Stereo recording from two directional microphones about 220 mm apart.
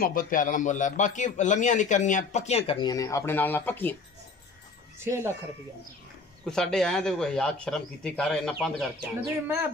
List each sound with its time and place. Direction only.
0.0 s a man's voice: 40° left (ahead or behind); by 3.9 s 10° left (ahead or behind)
5.0 s speech: 10° right (ahead or behind)
6.4 s speech: 5° left (ahead or behind)
9.2 s speech: 10° right (ahead or behind)